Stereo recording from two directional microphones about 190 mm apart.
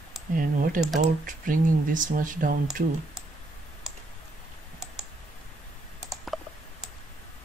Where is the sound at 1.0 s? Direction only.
45° right (ahead or behind).